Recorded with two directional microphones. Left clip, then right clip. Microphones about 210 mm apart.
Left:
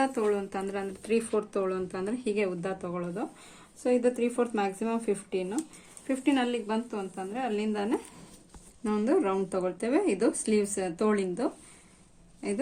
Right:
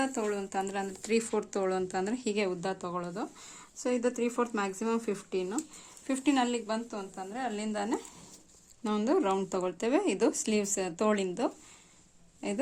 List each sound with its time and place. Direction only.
0.0 s speech: 45° right (ahead or behind)